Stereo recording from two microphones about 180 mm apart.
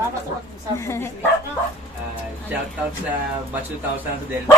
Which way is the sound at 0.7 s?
15° left (ahead or behind).